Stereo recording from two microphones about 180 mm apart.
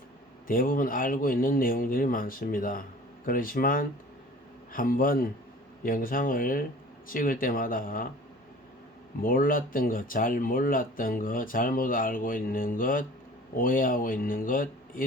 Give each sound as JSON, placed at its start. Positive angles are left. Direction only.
{"t": 0.4, "sound": "speech", "side_deg": 50}
{"t": 9.2, "sound": "speech", "side_deg": 50}